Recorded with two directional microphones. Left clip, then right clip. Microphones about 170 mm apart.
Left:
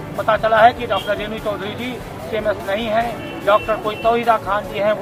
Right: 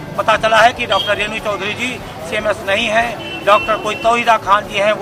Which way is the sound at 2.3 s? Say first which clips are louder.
Right 4 dB; 15° right (ahead or behind).